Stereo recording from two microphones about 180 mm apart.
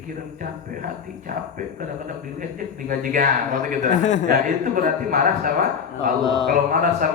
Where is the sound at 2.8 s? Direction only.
50° right (ahead or behind).